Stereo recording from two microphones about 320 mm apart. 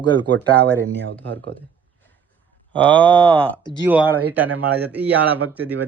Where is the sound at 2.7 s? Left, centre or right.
Centre.